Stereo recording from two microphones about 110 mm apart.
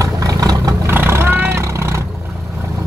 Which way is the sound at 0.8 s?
20° right (ahead or behind).